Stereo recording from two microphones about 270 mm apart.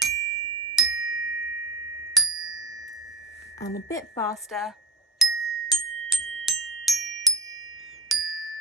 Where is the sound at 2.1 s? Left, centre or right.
Centre.